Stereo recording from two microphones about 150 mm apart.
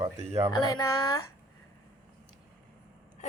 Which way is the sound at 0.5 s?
25° left (ahead or behind).